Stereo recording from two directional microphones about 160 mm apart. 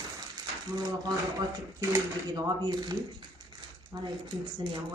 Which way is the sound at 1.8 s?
20° right (ahead or behind).